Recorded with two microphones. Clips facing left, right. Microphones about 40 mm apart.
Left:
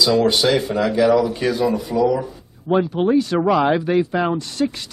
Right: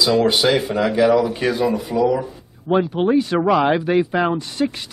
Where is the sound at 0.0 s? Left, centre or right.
Centre.